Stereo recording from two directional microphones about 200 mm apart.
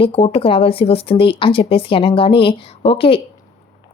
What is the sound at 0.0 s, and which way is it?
Speech, 30° left (ahead or behind).